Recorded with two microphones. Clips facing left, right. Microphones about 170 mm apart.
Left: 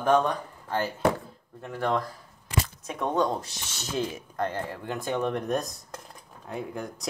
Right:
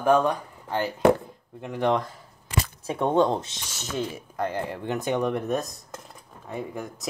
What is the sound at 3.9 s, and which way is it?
Speech, 5° right (ahead or behind).